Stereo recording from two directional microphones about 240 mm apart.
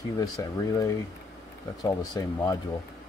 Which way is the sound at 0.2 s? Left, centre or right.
Centre.